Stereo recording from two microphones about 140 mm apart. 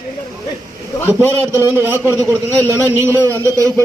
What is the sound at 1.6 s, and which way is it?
A man's voice, 15° right (ahead or behind).